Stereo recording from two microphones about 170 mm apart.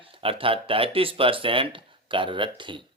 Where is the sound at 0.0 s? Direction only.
30° right (ahead or behind).